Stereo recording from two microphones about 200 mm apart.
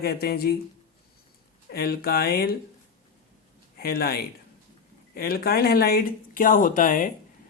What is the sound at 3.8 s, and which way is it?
Speech, 50° left (ahead or behind).